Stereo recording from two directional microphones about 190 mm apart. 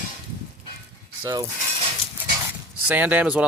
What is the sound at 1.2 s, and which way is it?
Speech, 20° right (ahead or behind).